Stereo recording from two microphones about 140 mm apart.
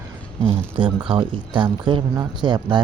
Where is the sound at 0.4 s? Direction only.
35° right (ahead or behind).